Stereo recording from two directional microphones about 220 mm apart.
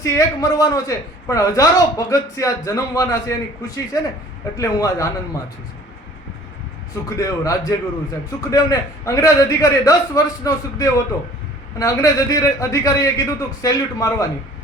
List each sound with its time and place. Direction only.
0.0 s a man's voice: 15° left (ahead or behind)
6.9 s a man's voice: 15° left (ahead or behind)